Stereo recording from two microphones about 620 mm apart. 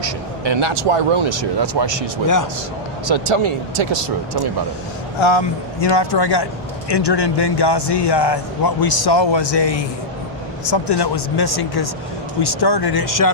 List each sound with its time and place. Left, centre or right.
0.0 s speech: right
1.6 s speech: right
2.2 s a man's voice: left
3.1 s speech: right
5.2 s a man's voice: left